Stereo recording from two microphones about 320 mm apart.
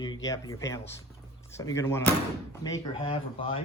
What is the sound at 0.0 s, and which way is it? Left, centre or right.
Speech, centre.